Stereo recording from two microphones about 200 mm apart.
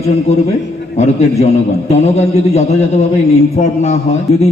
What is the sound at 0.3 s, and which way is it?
A man's voice, 30° left (ahead or behind).